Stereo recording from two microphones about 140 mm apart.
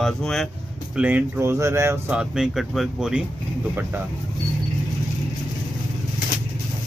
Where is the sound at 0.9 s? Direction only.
10° right (ahead or behind).